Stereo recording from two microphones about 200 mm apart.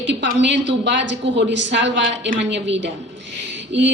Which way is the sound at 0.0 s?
60° right (ahead or behind).